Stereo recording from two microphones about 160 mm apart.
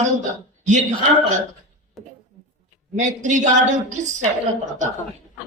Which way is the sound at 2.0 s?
Centre (ahead or behind).